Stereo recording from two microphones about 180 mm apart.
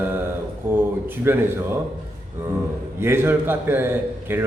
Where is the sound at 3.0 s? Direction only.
15° right (ahead or behind).